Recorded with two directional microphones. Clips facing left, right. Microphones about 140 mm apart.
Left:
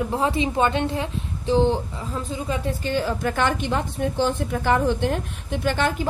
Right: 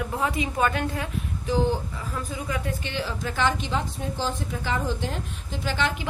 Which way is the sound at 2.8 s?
45° left (ahead or behind).